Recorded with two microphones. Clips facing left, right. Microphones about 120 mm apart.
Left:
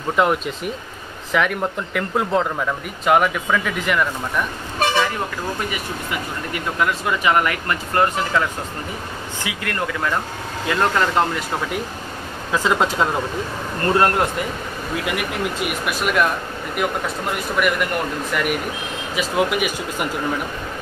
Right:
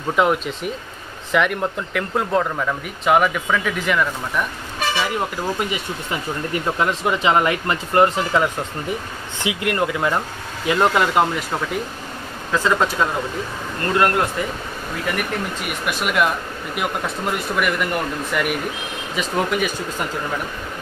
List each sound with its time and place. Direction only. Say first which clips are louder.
0.1 s speech: even; centre (ahead or behind)
5.7 s speech: right 1 dB; 25° right (ahead or behind)
12.5 s speech: even; 15° left (ahead or behind)
13.8 s speech: left 1 dB; 30° left (ahead or behind)
15.8 s speech: even; centre (ahead or behind)
17.6 s speech: left 3 dB; centre (ahead or behind)
19.1 s speech: left 1 dB; 10° left (ahead or behind)